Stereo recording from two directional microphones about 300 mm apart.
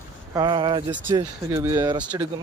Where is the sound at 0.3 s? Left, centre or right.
Centre.